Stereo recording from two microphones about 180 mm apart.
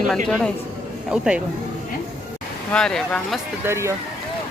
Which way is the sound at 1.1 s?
5° right (ahead or behind).